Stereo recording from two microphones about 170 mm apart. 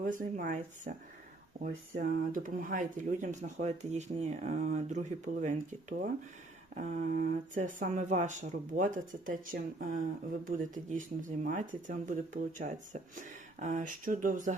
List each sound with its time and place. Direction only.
0.0 s speech: 50° right (ahead or behind)
6.7 s speech: 45° right (ahead or behind)